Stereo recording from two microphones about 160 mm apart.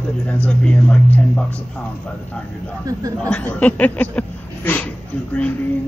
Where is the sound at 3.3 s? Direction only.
10° left (ahead or behind).